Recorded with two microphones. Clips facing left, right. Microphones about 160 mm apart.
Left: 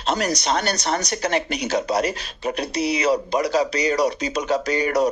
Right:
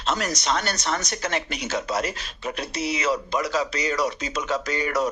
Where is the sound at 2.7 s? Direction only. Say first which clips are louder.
Left 5 dB; 15° left (ahead or behind).